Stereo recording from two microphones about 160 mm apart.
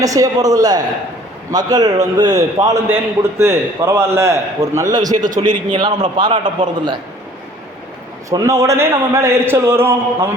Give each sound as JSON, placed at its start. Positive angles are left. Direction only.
{"t": 0.0, "sound": "a man's voice", "side_deg": -20}
{"t": 8.3, "sound": "a man's voice", "side_deg": -20}